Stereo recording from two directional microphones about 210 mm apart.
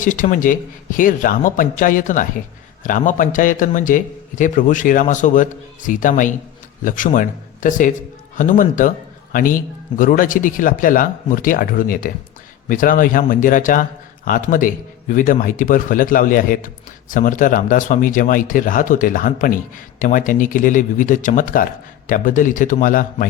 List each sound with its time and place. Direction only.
0.0 s a man's voice: 40° left (ahead or behind)